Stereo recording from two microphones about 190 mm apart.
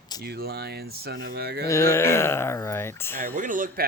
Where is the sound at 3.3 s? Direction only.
45° right (ahead or behind).